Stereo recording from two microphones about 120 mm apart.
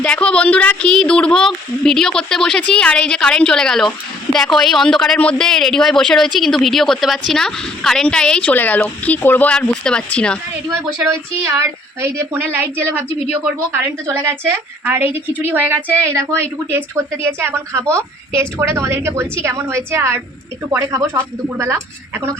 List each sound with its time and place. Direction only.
0.0 s speech: 10° left (ahead or behind)
10.8 s a woman's voice: 25° right (ahead or behind)